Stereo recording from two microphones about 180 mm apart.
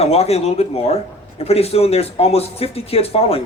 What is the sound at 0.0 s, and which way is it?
Speech, 35° left (ahead or behind).